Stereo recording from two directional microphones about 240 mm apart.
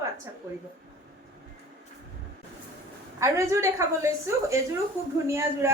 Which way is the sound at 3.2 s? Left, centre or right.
Centre.